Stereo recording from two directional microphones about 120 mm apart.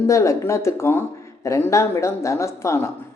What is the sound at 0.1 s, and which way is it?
A man's voice, 25° left (ahead or behind).